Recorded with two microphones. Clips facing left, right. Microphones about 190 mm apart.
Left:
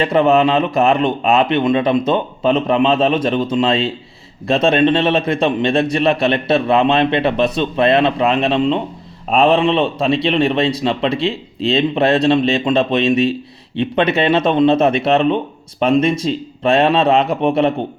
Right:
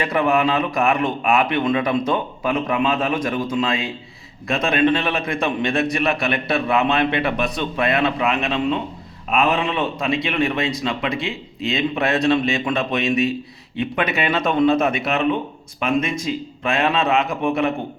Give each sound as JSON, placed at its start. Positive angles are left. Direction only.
{"t": 0.0, "sound": "a man's voice", "side_deg": 25}